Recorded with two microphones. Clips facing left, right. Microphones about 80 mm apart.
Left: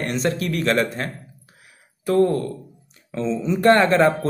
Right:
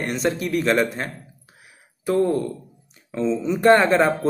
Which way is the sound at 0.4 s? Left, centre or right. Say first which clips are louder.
Right 2 dB; centre.